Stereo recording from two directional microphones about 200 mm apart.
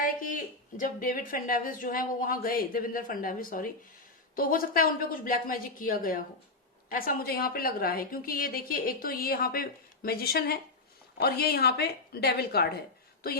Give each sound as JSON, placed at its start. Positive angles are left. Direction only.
{"t": 0.0, "sound": "speech", "side_deg": 45}